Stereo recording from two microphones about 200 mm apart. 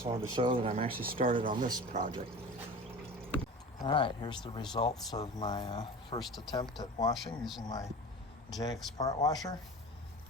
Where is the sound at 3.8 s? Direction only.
25° left (ahead or behind).